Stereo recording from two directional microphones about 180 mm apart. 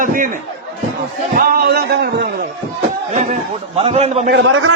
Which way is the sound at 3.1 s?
40° right (ahead or behind).